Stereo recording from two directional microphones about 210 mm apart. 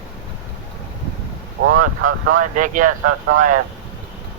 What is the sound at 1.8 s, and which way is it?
Speech, 40° right (ahead or behind).